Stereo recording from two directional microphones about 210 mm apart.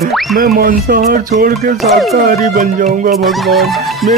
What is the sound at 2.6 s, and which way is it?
Music, 40° right (ahead or behind).